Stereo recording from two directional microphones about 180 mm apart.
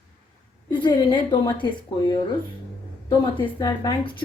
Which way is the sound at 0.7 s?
25° left (ahead or behind).